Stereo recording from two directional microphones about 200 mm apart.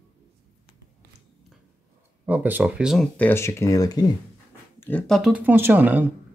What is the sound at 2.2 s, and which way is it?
Speech, 10° right (ahead or behind).